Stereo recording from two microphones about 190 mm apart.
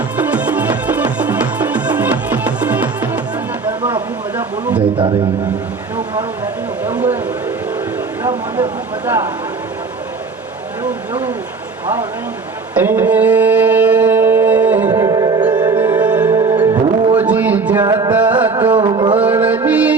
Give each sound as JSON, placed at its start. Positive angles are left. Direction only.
{"t": 0.2, "sound": "music", "side_deg": -5}
{"t": 3.8, "sound": "a sound", "side_deg": -10}
{"t": 6.8, "sound": "a sound", "side_deg": -10}
{"t": 8.2, "sound": "speech", "side_deg": -10}
{"t": 10.8, "sound": "speech", "side_deg": -5}
{"t": 12.7, "sound": "a sound", "side_deg": -10}
{"t": 14.8, "sound": "music", "side_deg": -20}
{"t": 15.8, "sound": "music", "side_deg": -10}
{"t": 17.2, "sound": "a sound", "side_deg": -10}
{"t": 17.8, "sound": "music", "side_deg": -20}
{"t": 18.1, "sound": "music", "side_deg": -10}
{"t": 18.4, "sound": "music", "side_deg": -20}
{"t": 19.2, "sound": "music", "side_deg": -10}